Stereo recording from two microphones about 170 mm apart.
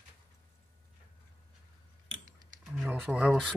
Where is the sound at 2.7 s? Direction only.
5° right (ahead or behind).